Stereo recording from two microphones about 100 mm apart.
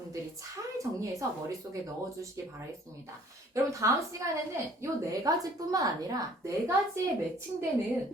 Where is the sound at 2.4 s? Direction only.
30° right (ahead or behind).